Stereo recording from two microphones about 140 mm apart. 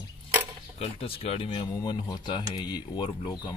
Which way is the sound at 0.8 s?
45° left (ahead or behind).